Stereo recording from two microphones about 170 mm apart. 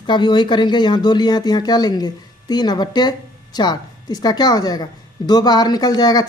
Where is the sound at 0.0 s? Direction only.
25° left (ahead or behind).